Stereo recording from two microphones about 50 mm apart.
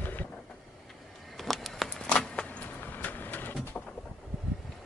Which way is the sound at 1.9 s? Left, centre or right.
Centre.